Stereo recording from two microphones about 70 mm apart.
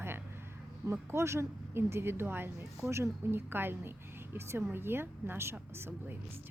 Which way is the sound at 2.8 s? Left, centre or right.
Right.